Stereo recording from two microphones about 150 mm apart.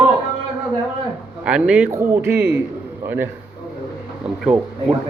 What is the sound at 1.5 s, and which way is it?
A man's voice, 5° right (ahead or behind).